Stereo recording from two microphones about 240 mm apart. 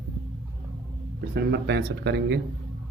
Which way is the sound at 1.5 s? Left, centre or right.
Right.